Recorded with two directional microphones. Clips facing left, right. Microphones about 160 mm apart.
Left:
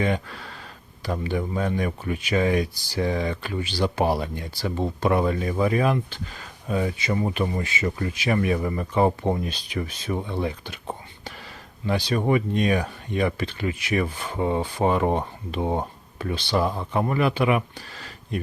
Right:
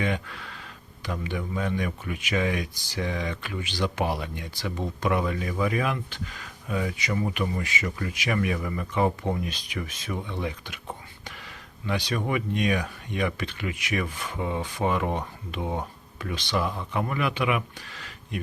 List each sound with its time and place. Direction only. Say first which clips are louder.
0.0 s speech: left 4 dB; 35° left (ahead or behind)